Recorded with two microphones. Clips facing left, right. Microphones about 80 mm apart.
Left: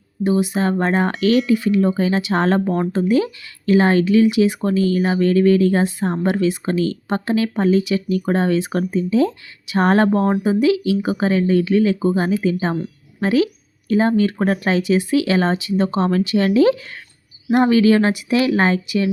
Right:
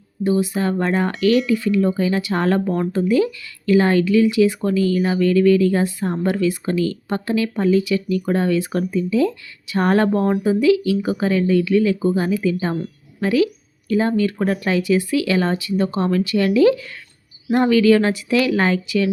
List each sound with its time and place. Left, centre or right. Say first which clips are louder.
0.3 s speech: left 1 dB; left
0.9 s speech: right 1 dB; left
1.5 s speech: left 1 dB; left
4.9 s speech: left 1 dB; left